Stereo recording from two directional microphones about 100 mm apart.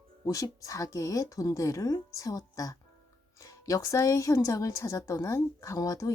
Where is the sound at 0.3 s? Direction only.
35° left (ahead or behind).